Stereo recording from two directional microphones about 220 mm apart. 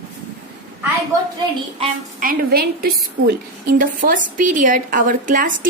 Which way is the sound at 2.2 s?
45° right (ahead or behind).